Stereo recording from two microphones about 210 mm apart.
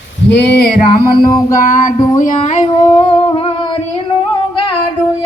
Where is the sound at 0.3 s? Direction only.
55° left (ahead or behind).